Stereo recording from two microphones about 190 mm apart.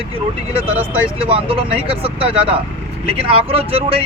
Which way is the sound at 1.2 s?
30° right (ahead or behind).